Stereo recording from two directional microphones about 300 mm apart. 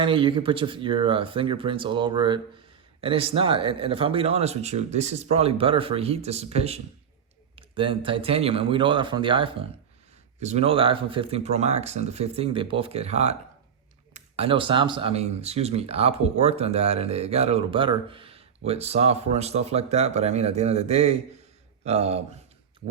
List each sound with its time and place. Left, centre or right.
0.0 s speech: centre